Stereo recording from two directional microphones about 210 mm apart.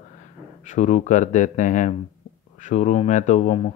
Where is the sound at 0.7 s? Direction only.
35° left (ahead or behind).